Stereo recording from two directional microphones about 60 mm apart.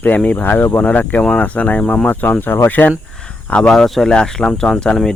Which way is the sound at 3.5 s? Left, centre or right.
Centre.